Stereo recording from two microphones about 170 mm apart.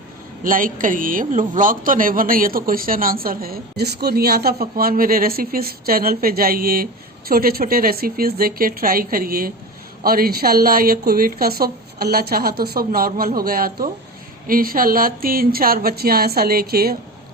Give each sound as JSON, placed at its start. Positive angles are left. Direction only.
{"t": 0.4, "sound": "speech", "side_deg": -55}